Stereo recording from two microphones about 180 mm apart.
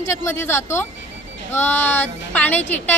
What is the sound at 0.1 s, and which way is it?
A woman's voice, 15° left (ahead or behind).